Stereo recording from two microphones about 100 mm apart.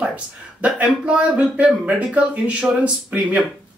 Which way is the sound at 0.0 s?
15° right (ahead or behind).